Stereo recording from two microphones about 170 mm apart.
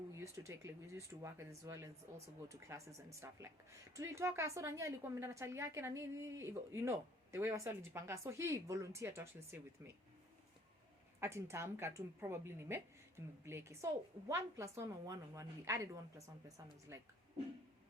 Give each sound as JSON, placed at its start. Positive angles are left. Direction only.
{"t": 0.2, "sound": "a woman's voice", "side_deg": -15}
{"t": 11.2, "sound": "a woman's voice", "side_deg": -15}